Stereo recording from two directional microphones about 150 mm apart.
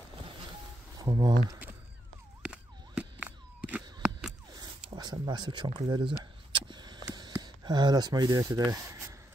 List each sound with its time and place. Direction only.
0.9 s speech: 25° right (ahead or behind)
2.4 s a sound: 10° right (ahead or behind)
4.6 s zipper: 25° right (ahead or behind)
8.7 s rub: 20° right (ahead or behind)